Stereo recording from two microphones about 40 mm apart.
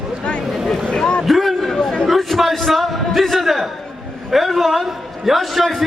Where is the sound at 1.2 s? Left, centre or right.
Centre.